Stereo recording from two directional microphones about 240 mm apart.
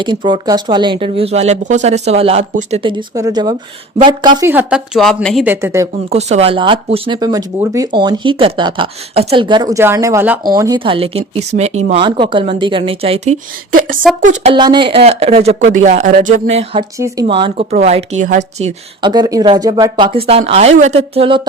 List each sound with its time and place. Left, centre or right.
0.0 s speech: centre
3.2 s speech: centre
6.1 s speech: right
19.0 s speech: centre